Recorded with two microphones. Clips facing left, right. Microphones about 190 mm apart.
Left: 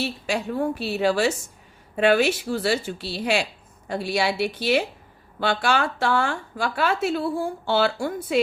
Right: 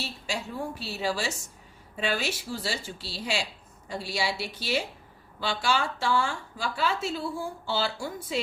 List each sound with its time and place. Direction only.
0.0 s a woman's voice: 60° left (ahead or behind)